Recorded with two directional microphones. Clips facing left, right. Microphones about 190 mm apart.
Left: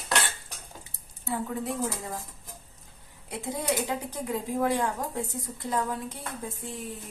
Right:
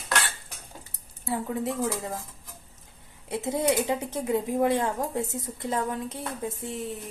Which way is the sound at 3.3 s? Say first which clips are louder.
Right 5 dB; 20° right (ahead or behind).